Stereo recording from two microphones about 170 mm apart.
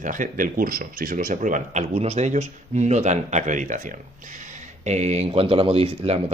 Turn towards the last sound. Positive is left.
turn(degrees=-35)  # may be behind; listen again after turning